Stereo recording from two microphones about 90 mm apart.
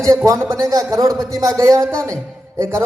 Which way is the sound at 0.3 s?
35° right (ahead or behind).